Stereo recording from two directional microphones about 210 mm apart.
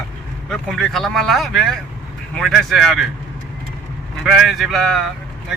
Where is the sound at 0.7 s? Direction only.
Centre (ahead or behind).